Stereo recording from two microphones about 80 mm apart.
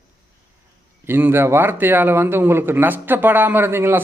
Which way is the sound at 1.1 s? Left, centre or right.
Right.